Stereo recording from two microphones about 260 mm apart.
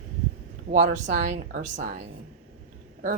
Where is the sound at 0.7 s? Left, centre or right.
Right.